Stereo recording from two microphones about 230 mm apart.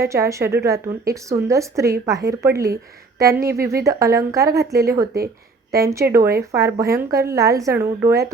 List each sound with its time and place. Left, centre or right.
0.0 s speech: centre
3.6 s speech: right
3.8 s speech: centre